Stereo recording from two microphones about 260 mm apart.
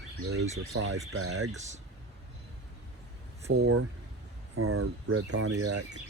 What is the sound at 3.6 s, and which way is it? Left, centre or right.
Speech, right.